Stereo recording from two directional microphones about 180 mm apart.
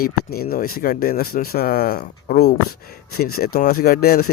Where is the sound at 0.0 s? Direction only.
55° left (ahead or behind).